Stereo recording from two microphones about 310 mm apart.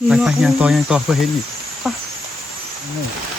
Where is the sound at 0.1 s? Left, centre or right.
Centre.